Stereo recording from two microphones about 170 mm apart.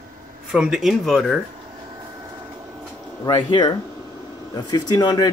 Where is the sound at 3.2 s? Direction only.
25° left (ahead or behind).